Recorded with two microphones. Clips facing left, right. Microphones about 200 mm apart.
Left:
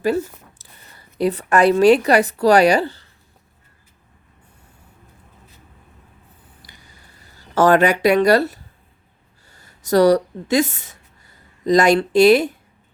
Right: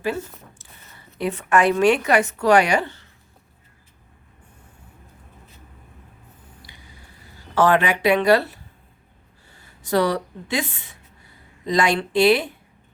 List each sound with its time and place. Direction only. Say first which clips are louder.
0.6 s a woman's voice: even; 35° left (ahead or behind)
7.5 s speech: left 4 dB; 40° left (ahead or behind)